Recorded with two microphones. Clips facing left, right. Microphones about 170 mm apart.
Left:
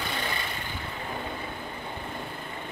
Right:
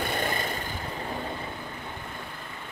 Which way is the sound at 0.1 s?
45° right (ahead or behind).